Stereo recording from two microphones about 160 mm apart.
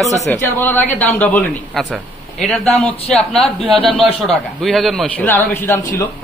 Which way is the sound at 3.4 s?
35° left (ahead or behind).